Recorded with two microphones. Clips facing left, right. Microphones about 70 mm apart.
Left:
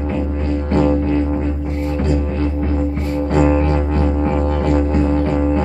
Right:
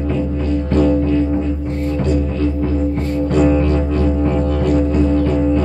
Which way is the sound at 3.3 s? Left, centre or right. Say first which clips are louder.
Right 1 dB; left.